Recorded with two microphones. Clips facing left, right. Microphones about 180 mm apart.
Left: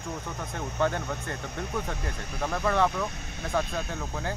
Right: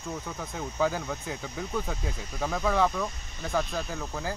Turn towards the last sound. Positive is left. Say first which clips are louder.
# even
turn(degrees=0)  # may be behind; listen again after turning